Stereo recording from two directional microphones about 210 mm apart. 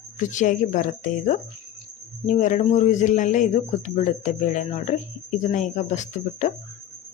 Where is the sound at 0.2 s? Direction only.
35° left (ahead or behind).